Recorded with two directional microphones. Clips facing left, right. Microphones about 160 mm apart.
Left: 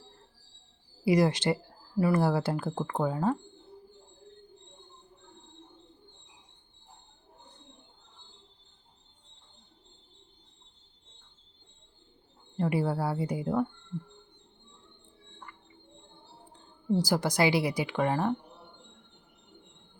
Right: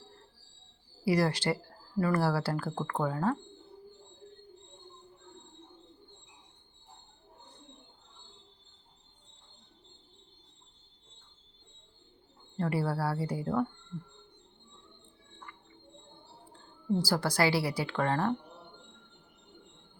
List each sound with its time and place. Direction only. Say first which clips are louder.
1.0 s speech: left 3 dB; 20° left (ahead or behind)
12.5 s a woman's voice: left 3 dB; 15° left (ahead or behind)
17.0 s a woman's voice: left 2 dB; 20° left (ahead or behind)